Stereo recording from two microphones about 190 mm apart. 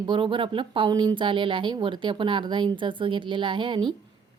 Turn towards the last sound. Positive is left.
turn(degrees=-25)  # may be behind; listen again after turning